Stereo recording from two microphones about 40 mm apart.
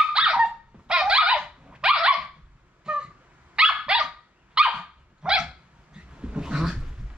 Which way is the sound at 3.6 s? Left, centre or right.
Right.